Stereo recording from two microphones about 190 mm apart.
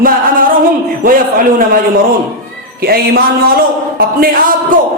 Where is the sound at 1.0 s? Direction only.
45° right (ahead or behind).